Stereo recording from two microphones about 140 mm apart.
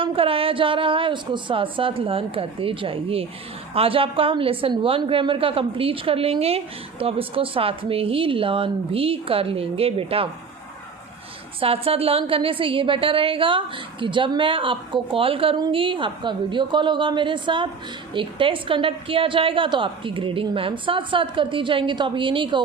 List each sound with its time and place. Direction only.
0.0 s a woman's voice: 40° right (ahead or behind)
11.6 s a woman's voice: 45° right (ahead or behind)